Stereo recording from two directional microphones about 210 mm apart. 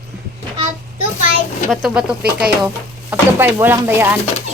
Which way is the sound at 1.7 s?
5° right (ahead or behind).